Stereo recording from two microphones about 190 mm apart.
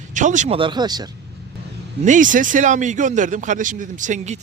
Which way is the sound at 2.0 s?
40° right (ahead or behind).